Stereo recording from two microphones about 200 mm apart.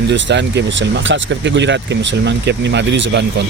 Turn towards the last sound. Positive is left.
turn(degrees=-60)  # may be behind; listen again after turning